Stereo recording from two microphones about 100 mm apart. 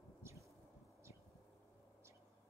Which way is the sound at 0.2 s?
30° right (ahead or behind).